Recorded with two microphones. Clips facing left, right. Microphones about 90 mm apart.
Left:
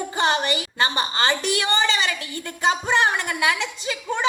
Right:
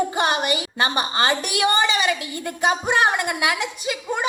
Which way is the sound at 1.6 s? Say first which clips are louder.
Right 6 dB; 20° right (ahead or behind).